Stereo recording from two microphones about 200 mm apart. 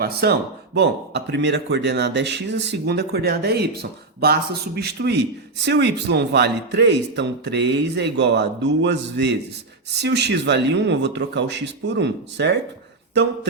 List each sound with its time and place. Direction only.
0.0 s speech: 50° right (ahead or behind)